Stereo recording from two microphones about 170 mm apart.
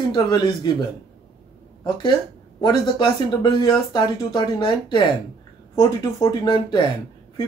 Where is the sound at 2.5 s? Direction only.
25° left (ahead or behind).